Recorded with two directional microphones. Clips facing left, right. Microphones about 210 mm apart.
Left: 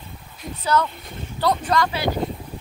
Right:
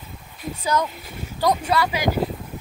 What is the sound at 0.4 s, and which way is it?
Speech, 10° right (ahead or behind).